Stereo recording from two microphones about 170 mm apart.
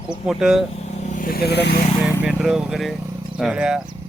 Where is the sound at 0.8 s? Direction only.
45° left (ahead or behind); by 1.7 s 75° left (ahead or behind).